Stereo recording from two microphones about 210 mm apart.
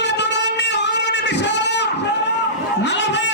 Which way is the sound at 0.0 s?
55° left (ahead or behind).